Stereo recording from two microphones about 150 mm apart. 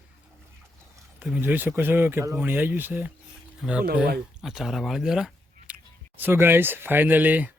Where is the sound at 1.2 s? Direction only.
10° right (ahead or behind).